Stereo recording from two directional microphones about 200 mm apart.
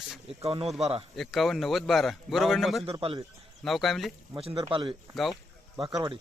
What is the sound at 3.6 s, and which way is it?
Speech, centre (ahead or behind).